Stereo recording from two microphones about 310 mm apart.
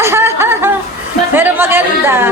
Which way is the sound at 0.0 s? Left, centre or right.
Centre.